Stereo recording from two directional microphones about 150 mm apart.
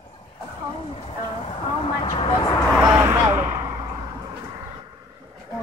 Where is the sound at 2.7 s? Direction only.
5° right (ahead or behind).